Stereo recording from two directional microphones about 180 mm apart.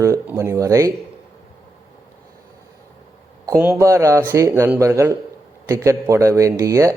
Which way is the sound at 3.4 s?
15° right (ahead or behind).